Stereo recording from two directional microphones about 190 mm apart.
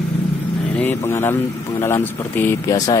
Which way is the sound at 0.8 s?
10° left (ahead or behind).